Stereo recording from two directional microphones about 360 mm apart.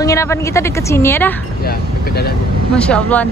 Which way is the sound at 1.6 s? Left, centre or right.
Left.